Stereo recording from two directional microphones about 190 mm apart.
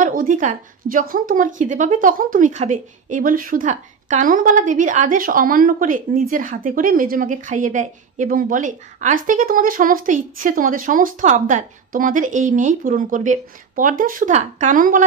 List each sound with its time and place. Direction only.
0.0 s speech: 45° right (ahead or behind)